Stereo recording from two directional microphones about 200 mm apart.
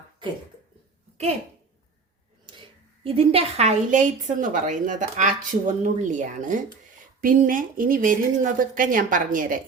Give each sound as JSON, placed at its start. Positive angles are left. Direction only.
{"t": 2.5, "sound": "a woman's voice", "side_deg": -25}